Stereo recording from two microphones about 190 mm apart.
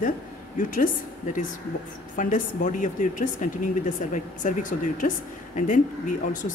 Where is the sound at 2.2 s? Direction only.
40° left (ahead or behind).